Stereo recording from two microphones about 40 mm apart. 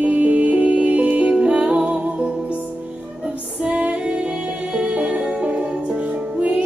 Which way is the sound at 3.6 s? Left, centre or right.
Right.